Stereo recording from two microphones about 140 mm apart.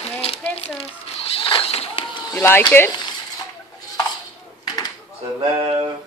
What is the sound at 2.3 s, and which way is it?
Speech, 15° left (ahead or behind).